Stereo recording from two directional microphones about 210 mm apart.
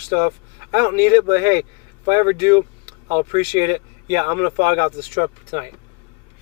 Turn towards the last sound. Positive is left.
turn(degrees=-20)  # may be behind; listen again after turning